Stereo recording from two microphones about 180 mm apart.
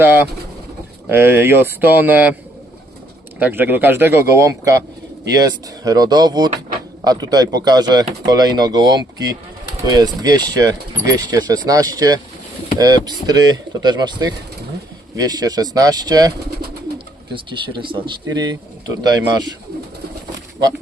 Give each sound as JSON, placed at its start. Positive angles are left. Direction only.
{"t": 1.0, "sound": "speech", "side_deg": -10}
{"t": 3.3, "sound": "speech", "side_deg": -10}
{"t": 17.3, "sound": "speech", "side_deg": -25}